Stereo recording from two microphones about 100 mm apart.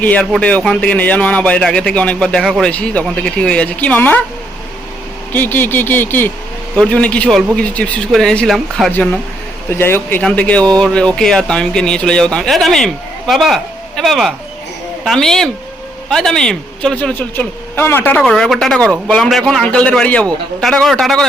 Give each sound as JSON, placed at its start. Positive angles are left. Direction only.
{"t": 0.0, "sound": "speech", "side_deg": 15}
{"t": 5.3, "sound": "a sound", "side_deg": 20}
{"t": 6.7, "sound": "speech", "side_deg": 10}
{"t": 9.7, "sound": "a sound", "side_deg": 25}
{"t": 10.2, "sound": "speech", "side_deg": 10}
{"t": 18.2, "sound": "speech", "side_deg": 5}